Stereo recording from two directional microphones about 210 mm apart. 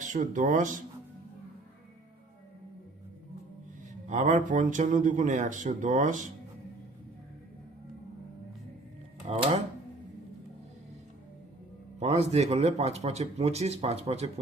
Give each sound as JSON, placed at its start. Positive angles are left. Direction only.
{"t": 0.0, "sound": "speech", "side_deg": -40}
{"t": 4.0, "sound": "speech", "side_deg": -35}
{"t": 9.3, "sound": "speech", "side_deg": -30}
{"t": 11.9, "sound": "speech", "side_deg": -30}